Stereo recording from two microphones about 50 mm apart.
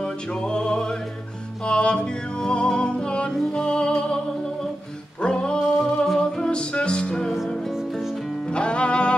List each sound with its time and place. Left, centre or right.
0.0 s music: centre
5.2 s music: centre
7.3 s music: centre
8.5 s music: centre